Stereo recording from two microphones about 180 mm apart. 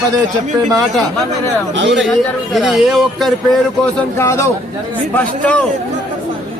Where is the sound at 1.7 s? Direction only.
85° right.